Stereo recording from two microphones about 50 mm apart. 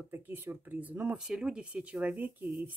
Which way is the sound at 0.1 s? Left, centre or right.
Right.